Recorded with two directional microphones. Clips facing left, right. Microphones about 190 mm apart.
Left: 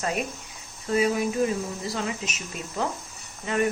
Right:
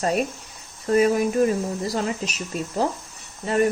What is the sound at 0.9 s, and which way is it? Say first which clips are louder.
Speech: right 5 dB; 45° right (ahead or behind).